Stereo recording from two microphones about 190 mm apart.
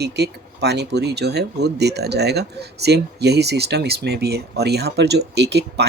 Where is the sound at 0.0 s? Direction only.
60° right (ahead or behind).